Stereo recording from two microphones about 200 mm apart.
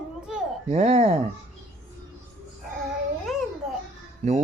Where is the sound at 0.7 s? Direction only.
35° right (ahead or behind).